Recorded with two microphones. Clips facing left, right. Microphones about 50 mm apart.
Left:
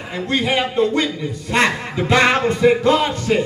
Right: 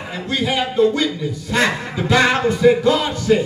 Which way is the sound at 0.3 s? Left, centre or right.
Left.